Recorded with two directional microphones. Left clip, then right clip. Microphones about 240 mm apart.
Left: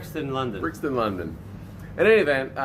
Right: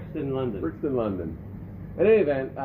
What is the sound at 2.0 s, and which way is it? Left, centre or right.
Speech, left.